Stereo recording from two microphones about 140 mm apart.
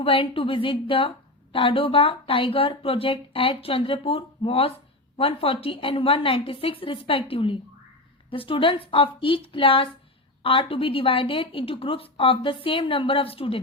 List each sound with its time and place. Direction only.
0.0 s a woman's voice: 40° left (ahead or behind)